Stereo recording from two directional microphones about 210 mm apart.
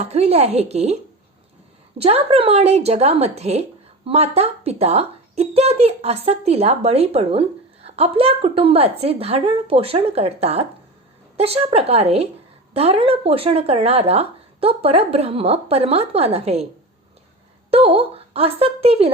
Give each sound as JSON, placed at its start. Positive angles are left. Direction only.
{"t": 0.0, "sound": "speech", "side_deg": -30}
{"t": 2.0, "sound": "speech", "side_deg": -30}
{"t": 17.7, "sound": "speech", "side_deg": -25}